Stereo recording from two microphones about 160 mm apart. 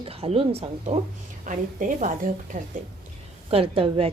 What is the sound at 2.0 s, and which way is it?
Speech, 55° right (ahead or behind).